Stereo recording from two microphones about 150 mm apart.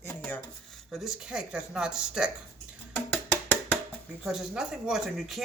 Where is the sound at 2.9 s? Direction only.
10° left (ahead or behind).